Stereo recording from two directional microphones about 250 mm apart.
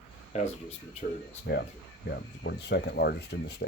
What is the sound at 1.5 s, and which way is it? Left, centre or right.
Speech, left.